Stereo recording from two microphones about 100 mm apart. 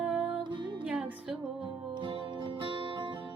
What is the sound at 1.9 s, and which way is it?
Music, 60° right (ahead or behind).